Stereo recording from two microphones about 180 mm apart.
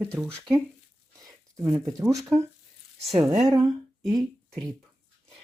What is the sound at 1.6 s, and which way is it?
Speech, 15° right (ahead or behind).